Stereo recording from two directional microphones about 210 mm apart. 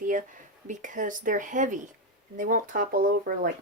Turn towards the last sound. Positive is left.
turn(degrees=-40)  # may be behind; listen again after turning